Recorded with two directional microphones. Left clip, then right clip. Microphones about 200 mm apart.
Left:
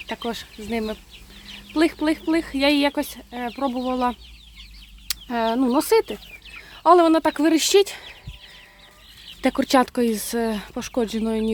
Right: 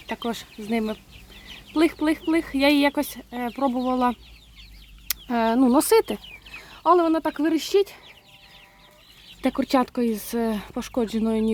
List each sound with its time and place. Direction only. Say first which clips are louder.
0.1 s speech: even; 5° right (ahead or behind)
6.8 s speech: left 4 dB; 15° left (ahead or behind)
9.4 s speech: left 4 dB; 5° left (ahead or behind)